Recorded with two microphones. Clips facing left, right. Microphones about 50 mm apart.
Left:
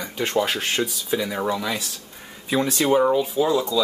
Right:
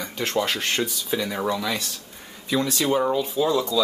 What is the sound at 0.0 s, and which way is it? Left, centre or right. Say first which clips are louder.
Speech: left 2 dB; centre.